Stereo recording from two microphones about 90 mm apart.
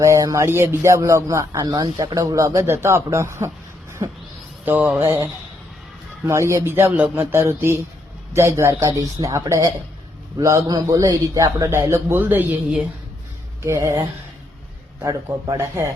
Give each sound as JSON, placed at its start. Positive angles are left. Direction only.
{"t": 0.0, "sound": "speech", "side_deg": -35}
{"t": 4.0, "sound": "owl", "side_deg": -50}
{"t": 4.6, "sound": "mantra", "side_deg": -20}
{"t": 4.9, "sound": "speech", "side_deg": -30}
{"t": 6.9, "sound": "mantra", "side_deg": -20}
{"t": 8.3, "sound": "a man's voice", "side_deg": -30}
{"t": 13.6, "sound": "speech", "side_deg": -35}
{"t": 15.5, "sound": "speech", "side_deg": -30}